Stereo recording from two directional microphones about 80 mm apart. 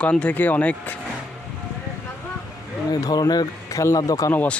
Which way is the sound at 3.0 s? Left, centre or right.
Left.